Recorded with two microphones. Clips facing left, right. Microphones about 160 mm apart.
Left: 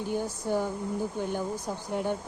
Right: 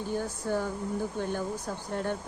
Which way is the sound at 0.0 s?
15° left (ahead or behind).